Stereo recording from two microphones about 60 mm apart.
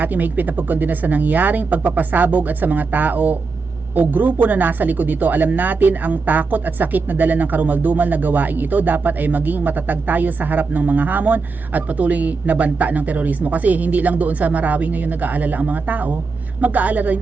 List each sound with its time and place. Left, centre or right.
0.0 s speech: right